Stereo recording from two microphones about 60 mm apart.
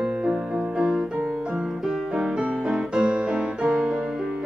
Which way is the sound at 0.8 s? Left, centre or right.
Centre.